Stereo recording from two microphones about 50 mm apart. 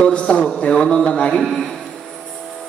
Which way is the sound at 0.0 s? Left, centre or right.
Left.